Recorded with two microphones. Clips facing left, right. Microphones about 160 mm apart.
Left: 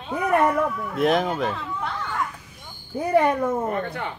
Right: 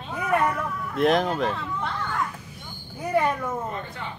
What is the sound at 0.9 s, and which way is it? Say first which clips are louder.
Speech: right 1 dB; centre (ahead or behind).